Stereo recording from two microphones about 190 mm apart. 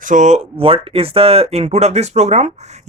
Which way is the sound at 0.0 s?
40° right (ahead or behind).